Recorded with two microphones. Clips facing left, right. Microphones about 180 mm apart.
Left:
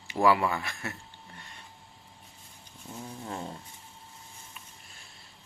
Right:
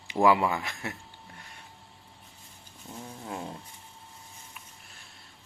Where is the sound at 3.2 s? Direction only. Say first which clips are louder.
Right 1 dB; 10° right (ahead or behind).